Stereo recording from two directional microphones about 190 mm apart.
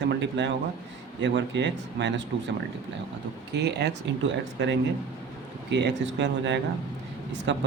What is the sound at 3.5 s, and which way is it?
Speech, 65° right (ahead or behind).